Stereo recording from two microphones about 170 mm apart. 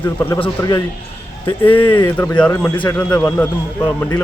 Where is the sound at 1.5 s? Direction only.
30° left (ahead or behind).